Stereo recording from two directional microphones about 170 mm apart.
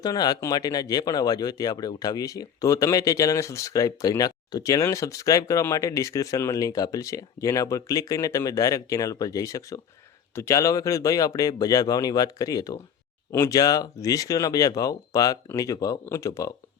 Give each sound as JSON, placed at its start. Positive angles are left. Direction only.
{"t": 0.0, "sound": "speech", "side_deg": 25}